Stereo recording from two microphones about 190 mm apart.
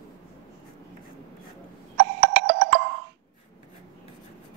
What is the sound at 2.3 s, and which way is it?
Music, 55° right (ahead or behind).